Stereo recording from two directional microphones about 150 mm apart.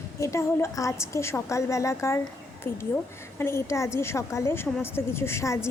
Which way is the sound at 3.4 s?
15° left (ahead or behind).